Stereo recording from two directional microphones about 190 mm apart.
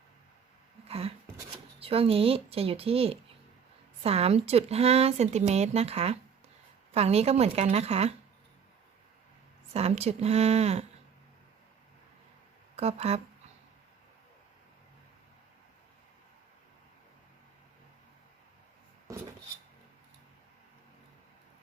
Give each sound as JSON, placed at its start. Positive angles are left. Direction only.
{"t": 0.9, "sound": "speech", "side_deg": -30}
{"t": 9.7, "sound": "speech", "side_deg": -35}
{"t": 12.7, "sound": "speech", "side_deg": -35}